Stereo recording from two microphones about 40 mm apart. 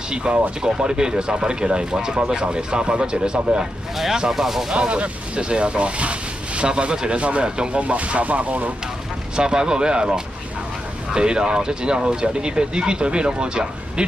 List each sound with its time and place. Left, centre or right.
0.1 s speech: right
4.7 s speech: right
7.7 s speech: right
9.4 s speech: right